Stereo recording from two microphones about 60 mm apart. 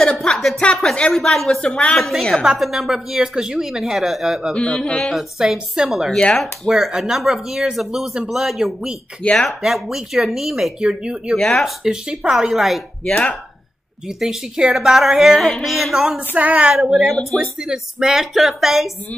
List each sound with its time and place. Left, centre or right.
0.0 s a woman's voice: centre
4.6 s a woman's voice: centre
5.4 s speech: centre
9.2 s a woman's voice: centre
9.5 s speech: centre
11.3 s a woman's voice: centre
11.6 s speech: centre
14.0 s speech: centre
15.0 s speech: centre
16.3 s a sound: right
16.9 s speech: centre
17.6 s speech: centre